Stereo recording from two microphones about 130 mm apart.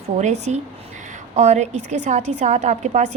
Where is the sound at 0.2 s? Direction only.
65° right (ahead or behind).